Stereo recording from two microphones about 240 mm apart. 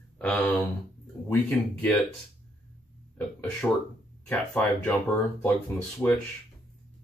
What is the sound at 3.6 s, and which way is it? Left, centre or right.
Speech, centre.